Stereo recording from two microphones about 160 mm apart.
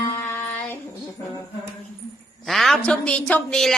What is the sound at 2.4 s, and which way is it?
A woman's voice, centre (ahead or behind).